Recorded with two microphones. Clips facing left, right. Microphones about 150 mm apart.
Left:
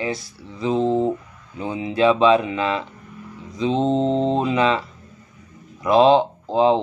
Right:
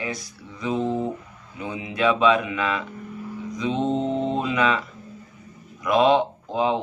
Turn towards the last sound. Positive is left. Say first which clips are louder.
# left 6 dB
turn(degrees=30)  # may be behind; listen again after turning